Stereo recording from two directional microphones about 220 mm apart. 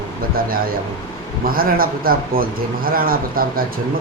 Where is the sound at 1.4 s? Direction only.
40° right (ahead or behind).